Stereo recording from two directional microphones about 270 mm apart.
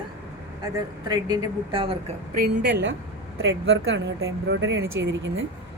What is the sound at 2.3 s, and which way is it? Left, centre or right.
Speech, right.